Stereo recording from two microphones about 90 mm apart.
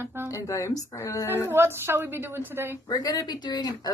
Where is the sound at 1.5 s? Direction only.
25° right (ahead or behind).